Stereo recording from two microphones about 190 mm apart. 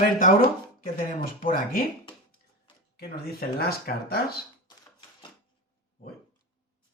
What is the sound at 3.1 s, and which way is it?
Speech, 50° left (ahead or behind).